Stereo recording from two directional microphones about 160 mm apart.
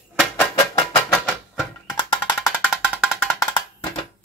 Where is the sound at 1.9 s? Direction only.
25° left (ahead or behind).